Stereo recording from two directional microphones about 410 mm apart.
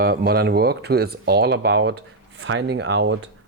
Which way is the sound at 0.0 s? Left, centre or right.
Right.